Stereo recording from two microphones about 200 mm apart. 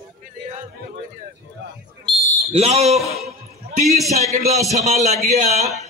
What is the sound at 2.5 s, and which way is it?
Speech, 30° right (ahead or behind).